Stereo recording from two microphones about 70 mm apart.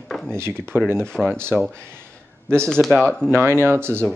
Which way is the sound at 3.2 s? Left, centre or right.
Right.